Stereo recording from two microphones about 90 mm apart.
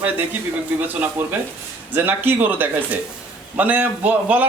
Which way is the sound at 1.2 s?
20° right (ahead or behind).